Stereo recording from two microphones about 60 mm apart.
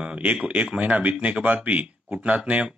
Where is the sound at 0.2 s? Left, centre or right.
Right.